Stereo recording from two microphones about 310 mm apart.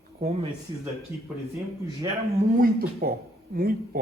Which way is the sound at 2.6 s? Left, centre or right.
Right.